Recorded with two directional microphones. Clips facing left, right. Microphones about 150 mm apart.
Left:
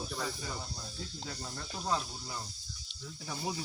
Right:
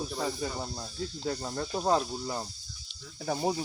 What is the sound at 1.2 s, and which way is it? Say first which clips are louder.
Speech: right 14 dB; 50° right (ahead or behind).